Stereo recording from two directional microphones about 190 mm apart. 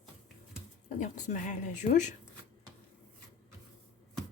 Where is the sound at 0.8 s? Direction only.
40° left (ahead or behind).